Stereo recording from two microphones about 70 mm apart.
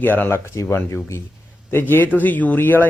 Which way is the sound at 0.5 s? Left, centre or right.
Left.